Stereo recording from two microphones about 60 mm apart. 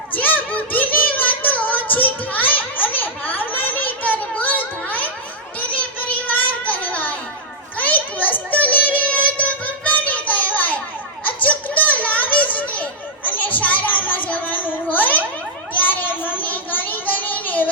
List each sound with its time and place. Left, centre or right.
0.1 s child singing: left
11.2 s a sound: left
16.3 s child singing: left